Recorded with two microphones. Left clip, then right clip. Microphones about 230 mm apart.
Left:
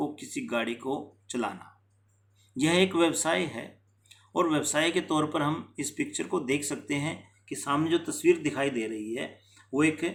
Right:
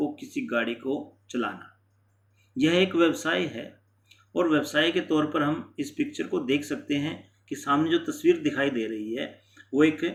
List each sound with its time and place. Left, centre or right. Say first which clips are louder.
0.2 s speech: right 3 dB; left
2.6 s speech: right 2 dB; left